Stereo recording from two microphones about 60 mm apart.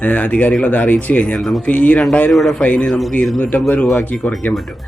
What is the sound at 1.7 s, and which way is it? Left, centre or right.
Speech, left.